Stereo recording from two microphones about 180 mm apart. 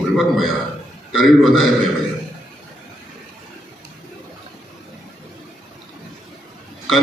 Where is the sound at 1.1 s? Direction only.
Centre (ahead or behind).